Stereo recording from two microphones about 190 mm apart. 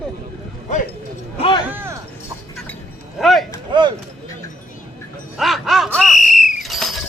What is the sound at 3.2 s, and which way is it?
Speech, centre (ahead or behind).